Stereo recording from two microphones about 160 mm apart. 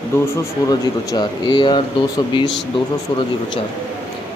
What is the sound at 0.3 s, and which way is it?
Speech, 20° left (ahead or behind).